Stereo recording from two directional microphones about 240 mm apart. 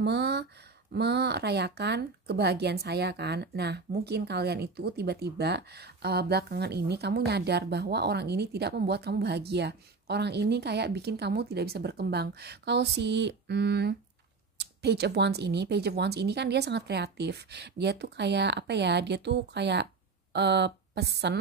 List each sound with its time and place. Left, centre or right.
0.0 s speech: right